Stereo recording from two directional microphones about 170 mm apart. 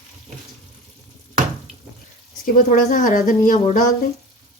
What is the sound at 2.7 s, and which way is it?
Speech, 50° left (ahead or behind).